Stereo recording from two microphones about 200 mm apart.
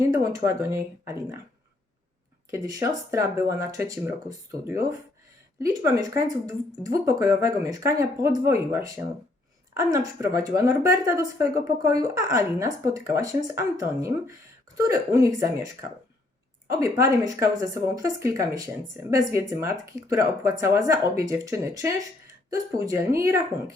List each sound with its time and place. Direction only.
0.3 s speech: 15° right (ahead or behind)
2.5 s speech: 15° right (ahead or behind)
16.8 s speech: 15° right (ahead or behind)